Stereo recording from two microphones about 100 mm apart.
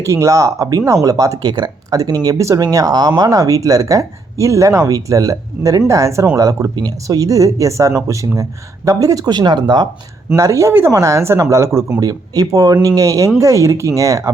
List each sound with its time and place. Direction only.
0.0 s speech: 30° right (ahead or behind)
10.3 s speech: 30° right (ahead or behind)